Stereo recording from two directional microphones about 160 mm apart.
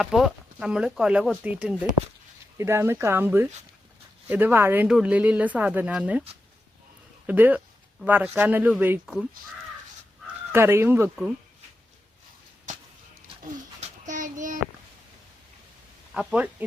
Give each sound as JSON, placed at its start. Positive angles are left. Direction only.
{"t": 0.0, "sound": "speech", "side_deg": 0}
{"t": 7.3, "sound": "speech", "side_deg": -10}
{"t": 10.5, "sound": "speech", "side_deg": -15}
{"t": 14.0, "sound": "child singing", "side_deg": -50}
{"t": 16.1, "sound": "speech", "side_deg": -10}